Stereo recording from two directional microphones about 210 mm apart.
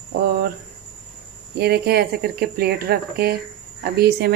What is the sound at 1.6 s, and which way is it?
Speech, 50° right (ahead or behind).